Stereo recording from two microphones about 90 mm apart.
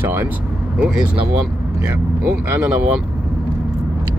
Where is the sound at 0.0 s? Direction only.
20° right (ahead or behind).